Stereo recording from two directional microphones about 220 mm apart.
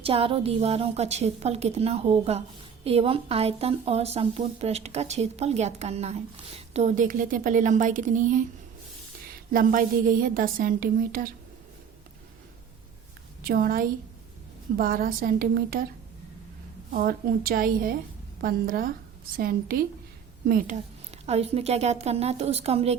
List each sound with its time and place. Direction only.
0.0 s a woman's voice: 25° right (ahead or behind)
9.5 s a woman's voice: 40° right (ahead or behind)
13.5 s a woman's voice: 40° right (ahead or behind)
16.9 s a woman's voice: 40° right (ahead or behind)
21.2 s a woman's voice: 30° right (ahead or behind)